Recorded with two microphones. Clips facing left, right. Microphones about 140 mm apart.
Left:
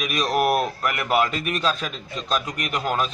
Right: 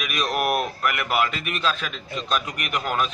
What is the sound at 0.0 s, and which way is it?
Speech, 35° left (ahead or behind).